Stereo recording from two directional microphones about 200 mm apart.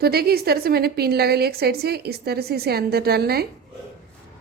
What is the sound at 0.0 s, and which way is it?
A woman's voice, 50° right (ahead or behind).